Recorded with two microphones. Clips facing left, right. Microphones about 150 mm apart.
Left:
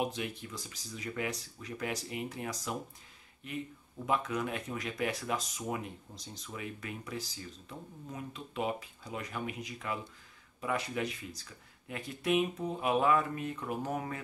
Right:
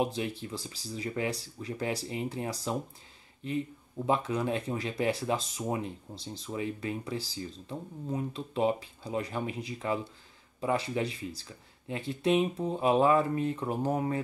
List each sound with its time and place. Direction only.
0.0 s speech: 30° right (ahead or behind)